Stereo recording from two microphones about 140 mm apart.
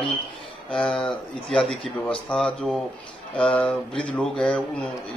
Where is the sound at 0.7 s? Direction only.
5° left (ahead or behind).